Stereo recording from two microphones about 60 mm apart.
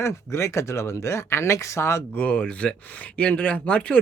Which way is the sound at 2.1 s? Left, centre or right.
Centre.